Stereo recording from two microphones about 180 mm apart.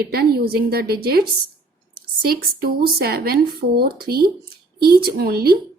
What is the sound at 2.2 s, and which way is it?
A woman's voice, 55° right (ahead or behind).